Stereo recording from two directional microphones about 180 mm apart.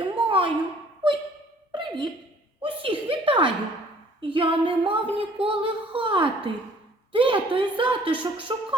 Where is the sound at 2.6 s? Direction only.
30° right (ahead or behind).